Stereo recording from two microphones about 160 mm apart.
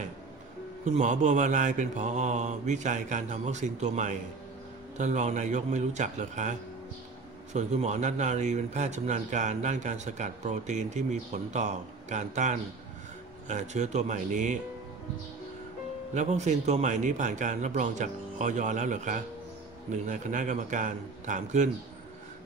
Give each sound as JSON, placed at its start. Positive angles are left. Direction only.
{"t": 0.8, "sound": "a man's voice", "side_deg": -50}
{"t": 7.5, "sound": "a man's voice", "side_deg": -45}
{"t": 16.2, "sound": "a man's voice", "side_deg": -45}